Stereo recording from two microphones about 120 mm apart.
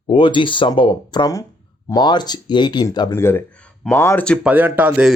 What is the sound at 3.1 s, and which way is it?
Speech, 20° left (ahead or behind).